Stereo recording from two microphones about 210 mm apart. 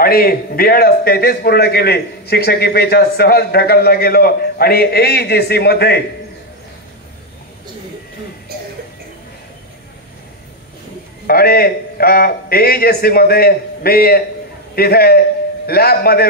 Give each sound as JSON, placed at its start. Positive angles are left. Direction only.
{"t": 0.0, "sound": "a man's voice", "side_deg": 45}
{"t": 11.2, "sound": "a man's voice", "side_deg": 45}